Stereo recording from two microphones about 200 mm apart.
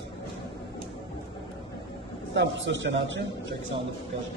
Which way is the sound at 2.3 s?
65° right (ahead or behind).